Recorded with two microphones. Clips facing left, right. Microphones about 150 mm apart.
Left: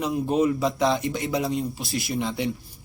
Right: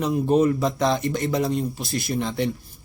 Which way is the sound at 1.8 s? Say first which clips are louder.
Right 2 dB; 45° right (ahead or behind).